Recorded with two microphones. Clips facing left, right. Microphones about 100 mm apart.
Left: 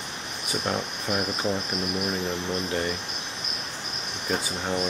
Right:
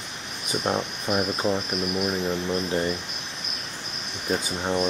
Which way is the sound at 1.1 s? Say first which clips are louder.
Right 3 dB; 5° right (ahead or behind).